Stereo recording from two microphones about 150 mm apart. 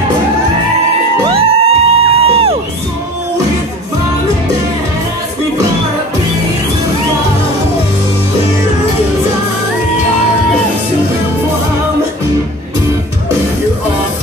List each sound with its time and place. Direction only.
1.3 s music: 40° right (ahead or behind)